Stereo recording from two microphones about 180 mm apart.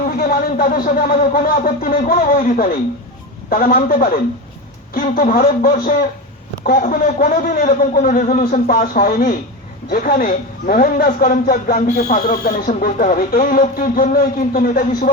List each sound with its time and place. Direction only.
0.2 s speech: 55° left (ahead or behind)
4.9 s speech: 50° left (ahead or behind)